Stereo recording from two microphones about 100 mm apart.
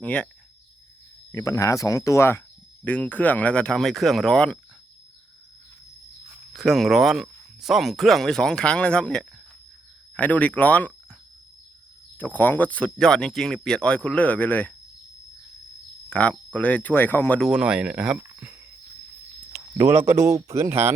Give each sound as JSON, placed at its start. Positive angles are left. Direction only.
{"t": 0.0, "sound": "speech", "side_deg": 10}
{"t": 1.3, "sound": "speech", "side_deg": 30}
{"t": 2.8, "sound": "speech", "side_deg": 15}
{"t": 6.5, "sound": "speech", "side_deg": 0}
{"t": 12.1, "sound": "speech", "side_deg": 15}
{"t": 16.0, "sound": "speech", "side_deg": 10}
{"t": 17.4, "sound": "speech", "side_deg": -5}
{"t": 18.2, "sound": "a sound", "side_deg": -20}
{"t": 19.8, "sound": "speech", "side_deg": -25}